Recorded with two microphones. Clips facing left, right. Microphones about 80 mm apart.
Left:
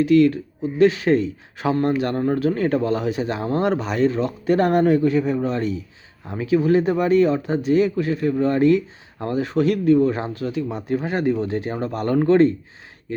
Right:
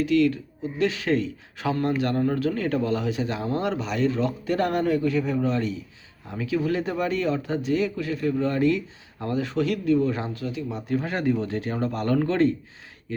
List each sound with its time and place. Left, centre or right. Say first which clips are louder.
0.0 s a man's voice: left 6 dB; left
10.9 s speech: left 3 dB; centre; by 12.5 s left